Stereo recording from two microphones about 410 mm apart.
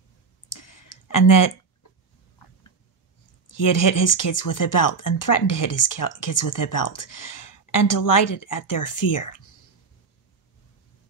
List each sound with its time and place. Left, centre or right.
0.5 s clicking: left
3.4 s speech: left